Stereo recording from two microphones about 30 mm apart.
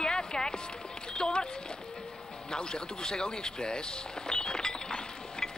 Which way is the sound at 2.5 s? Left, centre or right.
Left.